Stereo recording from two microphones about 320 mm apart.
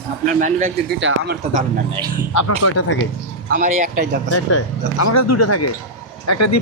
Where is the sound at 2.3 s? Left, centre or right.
Left.